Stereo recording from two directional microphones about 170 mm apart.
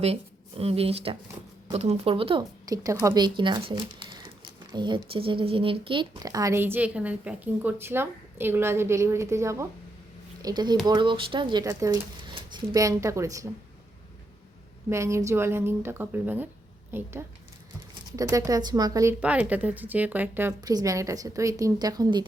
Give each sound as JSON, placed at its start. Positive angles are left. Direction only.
{"t": 0.0, "sound": "speech", "side_deg": -35}
{"t": 2.4, "sound": "speech", "side_deg": -20}
{"t": 14.8, "sound": "speech", "side_deg": -15}
{"t": 19.2, "sound": "speech", "side_deg": -10}
{"t": 20.6, "sound": "speech", "side_deg": -20}